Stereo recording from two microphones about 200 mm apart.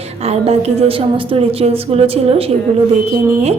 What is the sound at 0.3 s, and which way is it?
A woman's voice, 30° right (ahead or behind).